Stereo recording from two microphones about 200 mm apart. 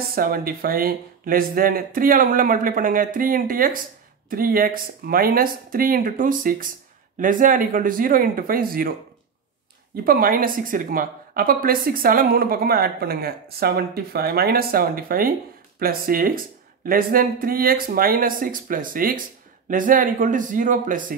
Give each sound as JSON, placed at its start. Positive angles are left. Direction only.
{"t": 0.1, "sound": "a woman's voice", "side_deg": -45}
{"t": 10.0, "sound": "a woman's voice", "side_deg": -45}